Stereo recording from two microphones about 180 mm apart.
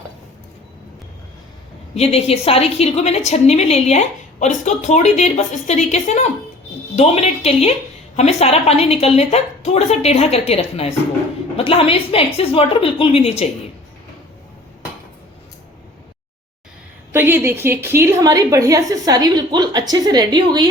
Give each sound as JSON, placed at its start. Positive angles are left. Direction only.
{"t": 2.0, "sound": "a woman's voice", "side_deg": 35}
{"t": 17.1, "sound": "a woman's voice", "side_deg": -10}